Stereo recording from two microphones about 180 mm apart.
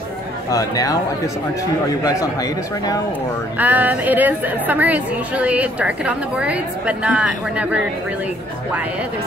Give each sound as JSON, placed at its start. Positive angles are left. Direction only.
{"t": 0.5, "sound": "speech", "side_deg": 20}
{"t": 3.5, "sound": "a woman's voice", "side_deg": -10}